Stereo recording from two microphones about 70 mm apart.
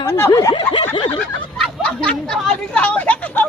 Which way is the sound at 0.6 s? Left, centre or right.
Left.